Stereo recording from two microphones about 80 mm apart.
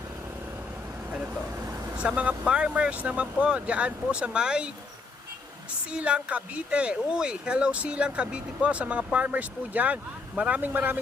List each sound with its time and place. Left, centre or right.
1.1 s speech: centre
5.9 s speech: centre